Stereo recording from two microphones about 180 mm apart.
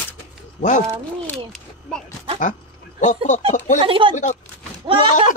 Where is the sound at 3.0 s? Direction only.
40° left (ahead or behind).